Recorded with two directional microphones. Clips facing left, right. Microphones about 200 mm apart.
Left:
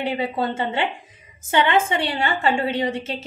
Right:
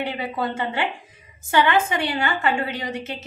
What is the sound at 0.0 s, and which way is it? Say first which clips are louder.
A woman's voice: left 3 dB; 25° left (ahead or behind).